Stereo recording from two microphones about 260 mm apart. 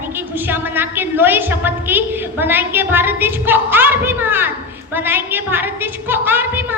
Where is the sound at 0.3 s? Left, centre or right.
Centre.